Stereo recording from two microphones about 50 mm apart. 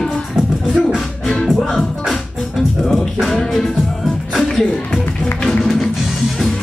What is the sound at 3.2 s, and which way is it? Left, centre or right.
Music, centre.